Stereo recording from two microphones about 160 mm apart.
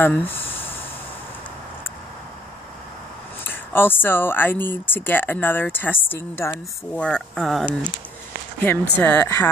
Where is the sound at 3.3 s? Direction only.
10° left (ahead or behind).